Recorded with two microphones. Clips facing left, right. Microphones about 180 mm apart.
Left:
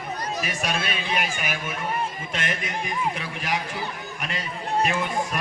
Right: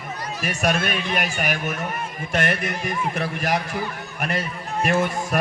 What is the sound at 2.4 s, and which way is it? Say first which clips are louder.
Speech: right 4 dB; 70° right (ahead or behind).